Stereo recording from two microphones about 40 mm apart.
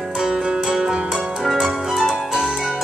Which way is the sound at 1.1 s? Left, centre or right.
Centre.